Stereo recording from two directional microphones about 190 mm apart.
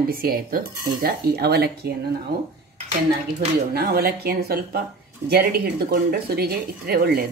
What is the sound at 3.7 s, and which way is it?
Speech, 55° right (ahead or behind).